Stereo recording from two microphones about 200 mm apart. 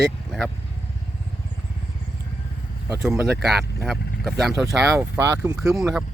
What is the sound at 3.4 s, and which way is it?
Speech, centre (ahead or behind).